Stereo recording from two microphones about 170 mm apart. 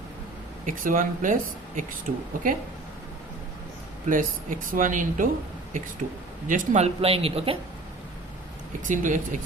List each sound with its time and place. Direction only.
0.6 s speech: 50° right (ahead or behind)
4.0 s speech: 50° right (ahead or behind)
6.5 s a man's voice: 40° right (ahead or behind)
8.9 s speech: 50° right (ahead or behind)